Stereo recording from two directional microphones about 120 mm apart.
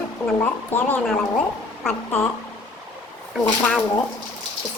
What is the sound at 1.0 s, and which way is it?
Speech, 5° left (ahead or behind).